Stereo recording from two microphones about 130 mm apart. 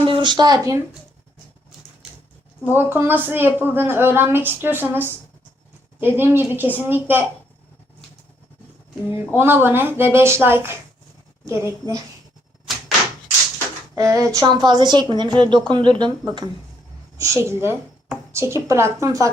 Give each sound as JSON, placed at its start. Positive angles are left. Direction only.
{"t": 0.0, "sound": "speech", "side_deg": -40}
{"t": 2.7, "sound": "a woman's voice", "side_deg": -15}
{"t": 9.0, "sound": "a woman's voice", "side_deg": -15}
{"t": 13.9, "sound": "speech", "side_deg": -25}
{"t": 14.4, "sound": "a woman's voice", "side_deg": -35}
{"t": 17.2, "sound": "a woman's voice", "side_deg": -20}